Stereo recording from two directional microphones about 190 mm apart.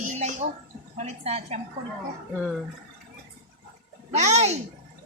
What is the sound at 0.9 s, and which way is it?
Speech, 35° right (ahead or behind).